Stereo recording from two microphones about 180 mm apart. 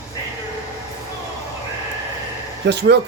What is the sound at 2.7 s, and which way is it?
Speech, 70° right (ahead or behind).